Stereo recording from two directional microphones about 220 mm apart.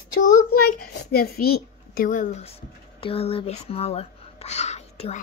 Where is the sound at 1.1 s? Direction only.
45° left (ahead or behind).